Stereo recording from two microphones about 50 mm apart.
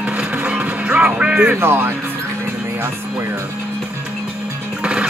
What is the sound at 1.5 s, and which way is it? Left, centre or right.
Speech, right.